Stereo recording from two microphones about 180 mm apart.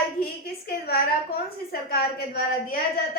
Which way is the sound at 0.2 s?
55° left (ahead or behind).